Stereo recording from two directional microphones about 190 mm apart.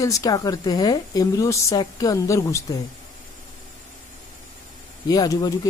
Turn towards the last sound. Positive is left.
turn(degrees=20)  # may be behind; listen again after turning